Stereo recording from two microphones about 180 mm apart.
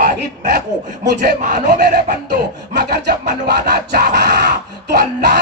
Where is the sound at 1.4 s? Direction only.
45° right (ahead or behind).